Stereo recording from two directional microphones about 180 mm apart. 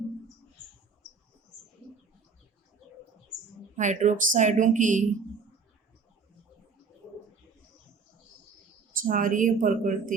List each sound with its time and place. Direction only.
3.8 s a woman's voice: 45° right (ahead or behind)
9.0 s a woman's voice: 50° right (ahead or behind)